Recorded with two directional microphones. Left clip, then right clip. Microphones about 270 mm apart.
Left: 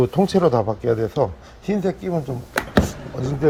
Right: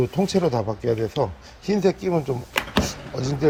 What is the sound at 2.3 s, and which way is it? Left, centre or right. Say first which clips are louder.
Speech: right 3 dB; centre.